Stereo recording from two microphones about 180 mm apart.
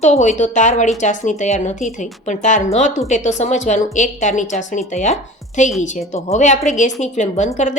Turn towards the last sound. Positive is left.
turn(degrees=40)  # may be behind; listen again after turning